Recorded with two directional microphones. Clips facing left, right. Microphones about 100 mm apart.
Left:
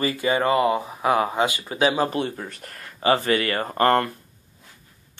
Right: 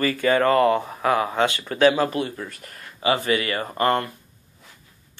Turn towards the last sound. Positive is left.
turn(degrees=45)  # may be behind; listen again after turning